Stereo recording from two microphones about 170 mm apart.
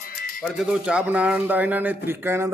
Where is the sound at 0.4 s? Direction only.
Centre (ahead or behind).